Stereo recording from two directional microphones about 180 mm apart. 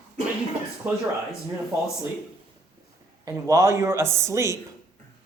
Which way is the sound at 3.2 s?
15° right (ahead or behind).